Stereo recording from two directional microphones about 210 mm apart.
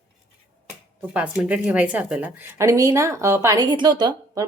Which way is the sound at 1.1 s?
5° right (ahead or behind).